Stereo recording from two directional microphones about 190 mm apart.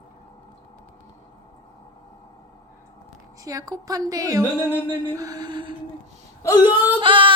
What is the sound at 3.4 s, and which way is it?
Speech, 20° right (ahead or behind).